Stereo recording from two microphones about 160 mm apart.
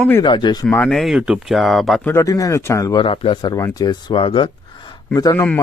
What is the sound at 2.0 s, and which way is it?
Speech, 20° left (ahead or behind).